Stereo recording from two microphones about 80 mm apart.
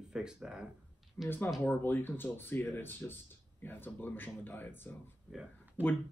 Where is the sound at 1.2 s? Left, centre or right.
Left.